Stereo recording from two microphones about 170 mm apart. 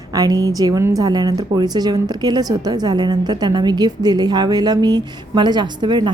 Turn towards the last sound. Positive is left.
turn(degrees=-25)  # may be behind; listen again after turning